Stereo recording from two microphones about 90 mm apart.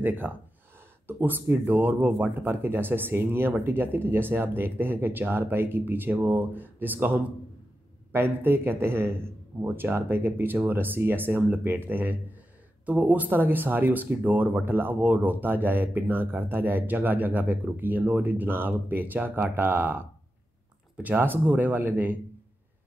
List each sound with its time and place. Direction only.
0.0 s speech: 20° right (ahead or behind)